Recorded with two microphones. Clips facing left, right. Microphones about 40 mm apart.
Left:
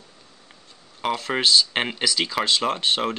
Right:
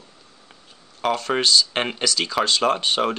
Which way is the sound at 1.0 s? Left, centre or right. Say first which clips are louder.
Right 2 dB; centre.